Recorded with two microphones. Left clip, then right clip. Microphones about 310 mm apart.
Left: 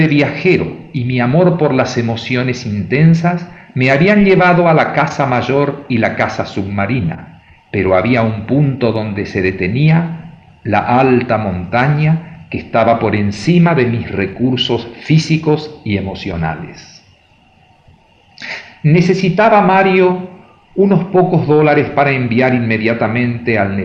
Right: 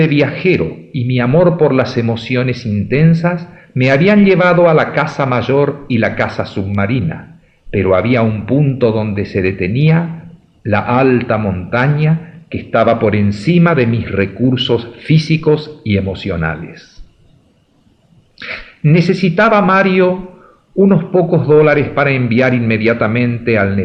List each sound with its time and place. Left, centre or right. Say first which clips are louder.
0.0 s speech: even; right
18.3 s a man's voice: even; right